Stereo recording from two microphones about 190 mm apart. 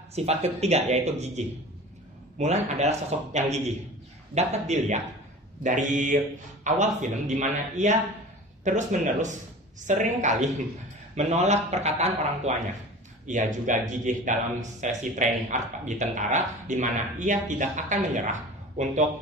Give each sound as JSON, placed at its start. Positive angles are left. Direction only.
{"t": 0.1, "sound": "speech", "side_deg": -35}